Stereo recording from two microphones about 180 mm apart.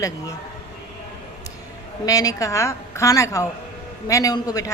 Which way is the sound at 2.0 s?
20° left (ahead or behind).